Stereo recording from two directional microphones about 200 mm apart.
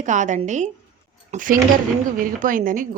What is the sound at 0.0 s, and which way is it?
A woman's voice, 40° right (ahead or behind).